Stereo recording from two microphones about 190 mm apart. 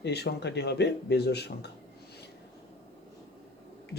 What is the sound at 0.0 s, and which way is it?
Speech, 60° left (ahead or behind).